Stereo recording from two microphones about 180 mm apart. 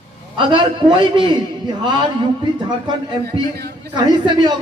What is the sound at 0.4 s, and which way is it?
A man's voice, 25° right (ahead or behind).